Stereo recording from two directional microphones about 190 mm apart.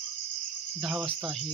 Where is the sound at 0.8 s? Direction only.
Centre (ahead or behind).